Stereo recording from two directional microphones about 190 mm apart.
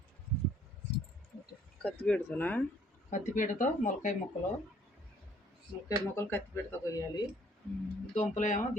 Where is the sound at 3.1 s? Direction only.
45° left (ahead or behind).